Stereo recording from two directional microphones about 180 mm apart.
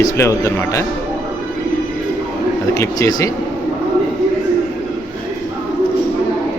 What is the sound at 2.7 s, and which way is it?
Speech, 15° left (ahead or behind).